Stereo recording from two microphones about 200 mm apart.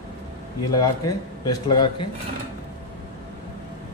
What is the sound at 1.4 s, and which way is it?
Speech, 20° left (ahead or behind).